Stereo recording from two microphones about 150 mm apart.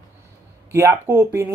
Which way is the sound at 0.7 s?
15° right (ahead or behind).